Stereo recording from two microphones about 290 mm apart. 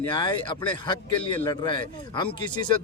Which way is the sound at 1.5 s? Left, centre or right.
Centre.